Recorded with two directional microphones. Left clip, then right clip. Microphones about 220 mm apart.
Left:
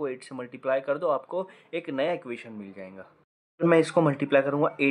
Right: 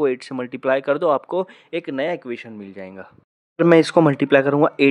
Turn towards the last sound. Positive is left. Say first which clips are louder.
# right 7 dB
turn(degrees=-40)  # may be behind; listen again after turning